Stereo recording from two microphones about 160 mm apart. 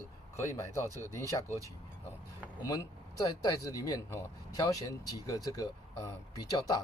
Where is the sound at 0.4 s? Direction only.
20° left (ahead or behind).